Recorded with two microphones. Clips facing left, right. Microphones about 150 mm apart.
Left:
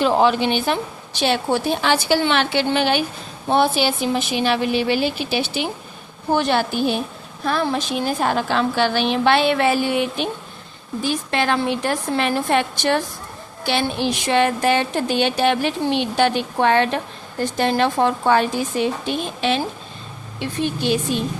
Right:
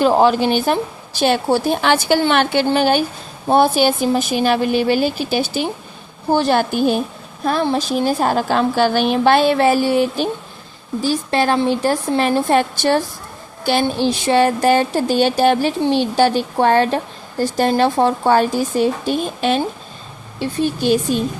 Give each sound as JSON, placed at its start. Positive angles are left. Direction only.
{"t": 0.0, "sound": "a woman's voice", "side_deg": -40}
{"t": 6.6, "sound": "a woman's voice", "side_deg": -50}
{"t": 7.4, "sound": "a woman's voice", "side_deg": -35}